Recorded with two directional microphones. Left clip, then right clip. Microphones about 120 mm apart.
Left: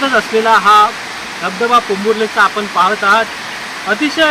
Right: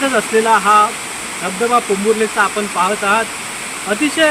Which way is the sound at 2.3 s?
45° right (ahead or behind).